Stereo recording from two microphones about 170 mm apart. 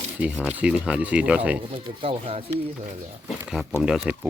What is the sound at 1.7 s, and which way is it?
Speech, 35° right (ahead or behind).